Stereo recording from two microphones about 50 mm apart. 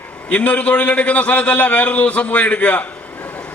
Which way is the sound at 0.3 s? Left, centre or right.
Left.